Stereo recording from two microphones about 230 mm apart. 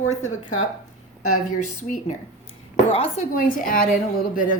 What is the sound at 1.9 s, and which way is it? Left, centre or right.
A woman's voice, left.